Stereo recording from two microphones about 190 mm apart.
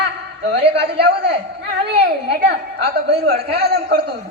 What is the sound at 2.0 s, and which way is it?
A woman's voice, 60° right (ahead or behind).